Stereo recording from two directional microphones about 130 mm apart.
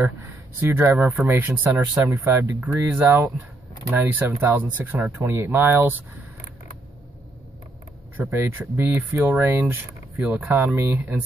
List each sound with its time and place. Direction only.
0.0 s speech: 15° right (ahead or behind)
8.2 s speech: 15° right (ahead or behind)